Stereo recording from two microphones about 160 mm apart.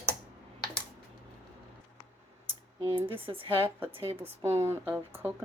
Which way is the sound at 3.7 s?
15° right (ahead or behind).